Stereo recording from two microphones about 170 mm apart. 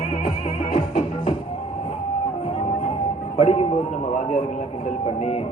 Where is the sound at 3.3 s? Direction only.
35° left (ahead or behind).